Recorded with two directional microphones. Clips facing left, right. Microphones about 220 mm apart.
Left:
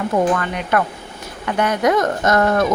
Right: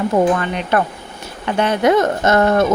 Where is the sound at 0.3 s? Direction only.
25° right (ahead or behind).